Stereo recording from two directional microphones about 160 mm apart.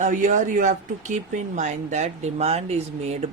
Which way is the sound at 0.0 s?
50° right (ahead or behind).